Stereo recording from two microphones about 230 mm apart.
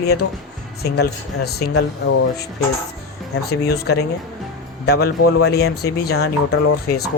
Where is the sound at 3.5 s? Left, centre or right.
Left.